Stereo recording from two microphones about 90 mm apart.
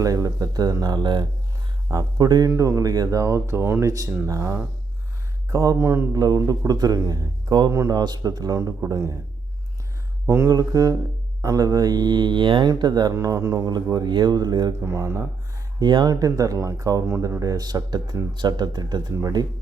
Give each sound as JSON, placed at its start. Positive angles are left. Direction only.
{"t": 0.0, "sound": "speech", "side_deg": -40}
{"t": 2.5, "sound": "speech", "side_deg": -35}
{"t": 5.8, "sound": "speech", "side_deg": -25}
{"t": 6.1, "sound": "speech", "side_deg": -45}
{"t": 7.7, "sound": "speech", "side_deg": -35}
{"t": 7.9, "sound": "speech", "side_deg": -50}
{"t": 10.2, "sound": "speech", "side_deg": -30}
{"t": 10.5, "sound": "speech", "side_deg": -45}
{"t": 13.1, "sound": "speech", "side_deg": -35}
{"t": 14.8, "sound": "speech", "side_deg": -35}
{"t": 15.8, "sound": "speech", "side_deg": -65}
{"t": 16.0, "sound": "speech", "side_deg": -40}
{"t": 17.4, "sound": "speech", "side_deg": -45}